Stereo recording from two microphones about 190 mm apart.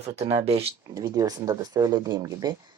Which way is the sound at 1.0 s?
20° right (ahead or behind).